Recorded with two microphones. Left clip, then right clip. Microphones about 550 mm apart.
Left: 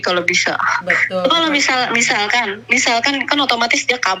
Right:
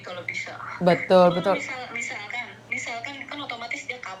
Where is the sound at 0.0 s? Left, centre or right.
Left.